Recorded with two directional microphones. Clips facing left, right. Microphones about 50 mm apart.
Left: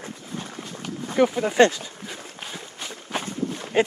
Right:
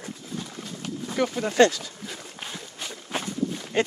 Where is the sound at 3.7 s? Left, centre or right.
Centre.